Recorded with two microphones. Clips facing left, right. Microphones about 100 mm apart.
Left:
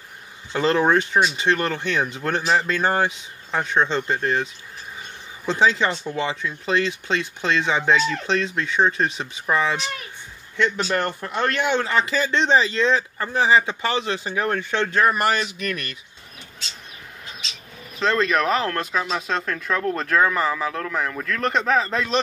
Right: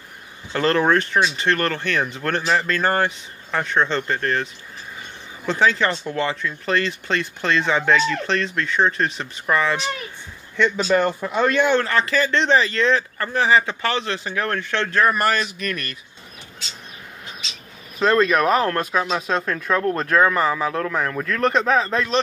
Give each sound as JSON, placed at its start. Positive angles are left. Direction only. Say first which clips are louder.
{"t": 0.5, "sound": "speech", "louder": "right 1 dB", "side_deg": 15}
{"t": 5.5, "sound": "speech", "louder": "even", "side_deg": 25}
{"t": 6.1, "sound": "speech", "louder": "right 2 dB", "side_deg": 10}
{"t": 11.0, "sound": "speech", "louder": "right 4 dB", "side_deg": -5}
{"t": 11.6, "sound": "speech", "louder": "right 2 dB", "side_deg": 15}
{"t": 17.9, "sound": "speech", "louder": "right 3 dB", "side_deg": -5}
{"t": 20.9, "sound": "speech", "louder": "right 2 dB", "side_deg": 0}